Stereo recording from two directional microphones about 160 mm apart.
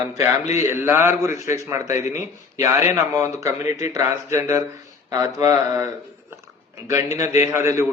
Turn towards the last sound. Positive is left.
turn(degrees=-20)  # may be behind; listen again after turning